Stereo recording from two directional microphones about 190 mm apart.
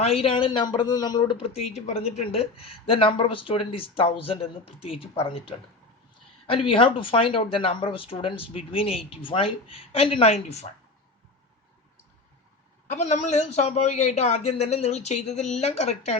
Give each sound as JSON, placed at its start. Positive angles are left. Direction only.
{"t": 0.0, "sound": "speech", "side_deg": 30}
{"t": 12.9, "sound": "a man's voice", "side_deg": 40}